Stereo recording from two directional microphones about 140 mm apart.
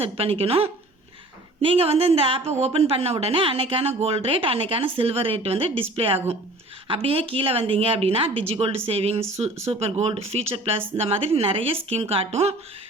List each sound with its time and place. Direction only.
0.0 s a woman's voice: 45° right (ahead or behind)